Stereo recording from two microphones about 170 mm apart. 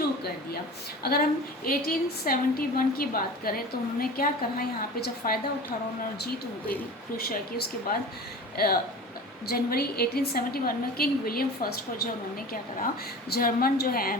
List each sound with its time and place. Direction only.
1.0 s a woman's voice: 60° left (ahead or behind)
7.3 s a woman's voice: 65° left (ahead or behind)
13.3 s a woman's voice: 60° left (ahead or behind)